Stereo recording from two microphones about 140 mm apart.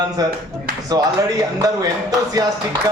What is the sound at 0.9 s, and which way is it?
Speech, 25° right (ahead or behind).